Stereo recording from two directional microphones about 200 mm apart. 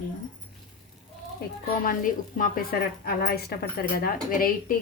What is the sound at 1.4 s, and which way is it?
Speech, 45° left (ahead or behind).